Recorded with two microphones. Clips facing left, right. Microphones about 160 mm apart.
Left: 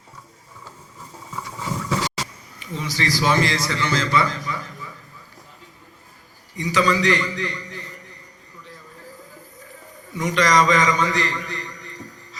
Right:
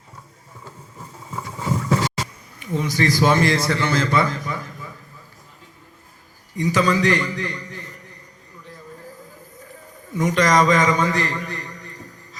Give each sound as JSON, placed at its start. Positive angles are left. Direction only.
{"t": 0.6, "sound": "a sound", "side_deg": -55}
{"t": 6.6, "sound": "a man's voice", "side_deg": -50}
{"t": 10.1, "sound": "a man's voice", "side_deg": -50}